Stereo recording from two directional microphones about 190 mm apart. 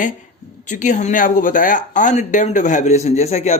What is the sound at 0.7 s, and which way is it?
A man's voice, 40° left (ahead or behind).